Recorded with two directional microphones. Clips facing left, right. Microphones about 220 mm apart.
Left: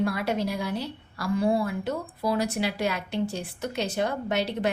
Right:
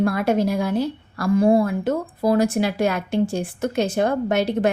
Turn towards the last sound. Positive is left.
turn(degrees=-50)  # may be behind; listen again after turning